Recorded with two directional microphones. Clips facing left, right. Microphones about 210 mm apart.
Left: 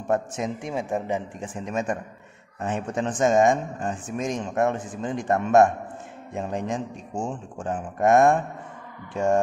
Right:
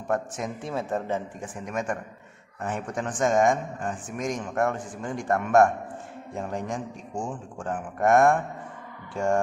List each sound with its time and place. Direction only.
0.1 s a man's voice: 20° left (ahead or behind)
1.4 s a man's voice: 25° left (ahead or behind)